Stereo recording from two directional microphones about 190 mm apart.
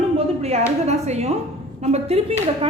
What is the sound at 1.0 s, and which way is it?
Speech, 35° right (ahead or behind).